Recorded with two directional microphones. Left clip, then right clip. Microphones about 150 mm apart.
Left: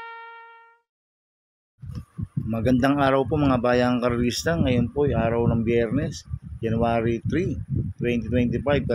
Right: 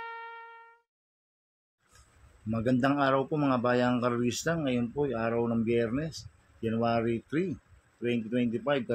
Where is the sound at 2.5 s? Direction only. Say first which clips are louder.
Left 6 dB; 60° left (ahead or behind).